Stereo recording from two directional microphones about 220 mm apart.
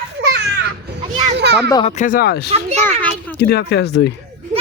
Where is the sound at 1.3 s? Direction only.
50° right (ahead or behind).